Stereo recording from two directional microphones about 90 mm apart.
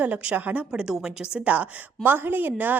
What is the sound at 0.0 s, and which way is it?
A woman's voice, 15° right (ahead or behind).